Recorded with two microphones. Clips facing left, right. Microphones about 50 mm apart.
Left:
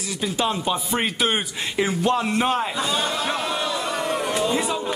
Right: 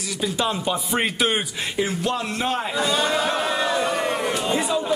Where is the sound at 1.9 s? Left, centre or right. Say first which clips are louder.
Left 3 dB; centre.